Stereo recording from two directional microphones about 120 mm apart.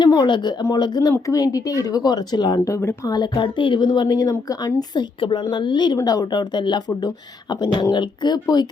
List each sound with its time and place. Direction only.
0.0 s speech: 35° left (ahead or behind)